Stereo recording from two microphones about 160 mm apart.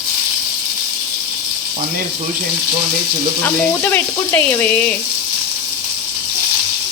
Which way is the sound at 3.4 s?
10° left (ahead or behind).